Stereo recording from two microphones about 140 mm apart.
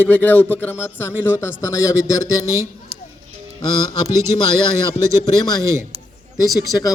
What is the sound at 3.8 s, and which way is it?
Speech, 25° left (ahead or behind).